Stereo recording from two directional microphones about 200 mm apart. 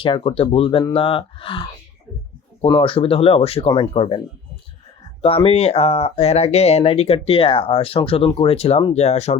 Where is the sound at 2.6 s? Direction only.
25° left (ahead or behind).